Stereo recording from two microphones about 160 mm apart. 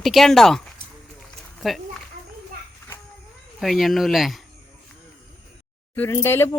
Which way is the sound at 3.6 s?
Centre (ahead or behind).